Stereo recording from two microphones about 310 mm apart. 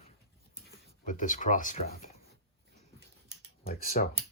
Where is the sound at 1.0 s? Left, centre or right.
Left.